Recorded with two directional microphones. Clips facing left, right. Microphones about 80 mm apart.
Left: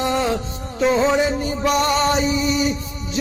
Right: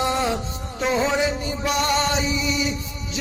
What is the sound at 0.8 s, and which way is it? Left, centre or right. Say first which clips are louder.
Music: left 4 dB; left.